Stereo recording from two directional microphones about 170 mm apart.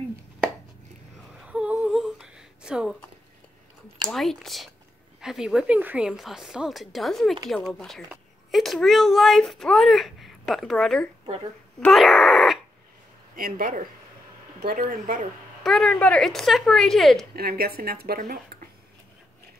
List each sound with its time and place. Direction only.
1.4 s humming: 5° right (ahead or behind)
4.1 s a child's voice: centre (ahead or behind)
11.8 s wail: centre (ahead or behind)
13.4 s speech: 55° right (ahead or behind)
15.6 s a child's voice: centre (ahead or behind)
17.4 s speech: 65° right (ahead or behind)